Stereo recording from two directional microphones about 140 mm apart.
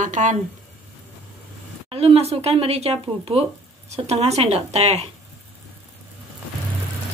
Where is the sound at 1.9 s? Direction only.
45° right (ahead or behind).